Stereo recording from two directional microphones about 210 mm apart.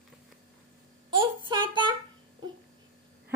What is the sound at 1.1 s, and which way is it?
Child singing, 20° right (ahead or behind).